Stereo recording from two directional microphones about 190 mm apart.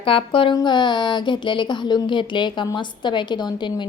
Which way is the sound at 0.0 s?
30° left (ahead or behind).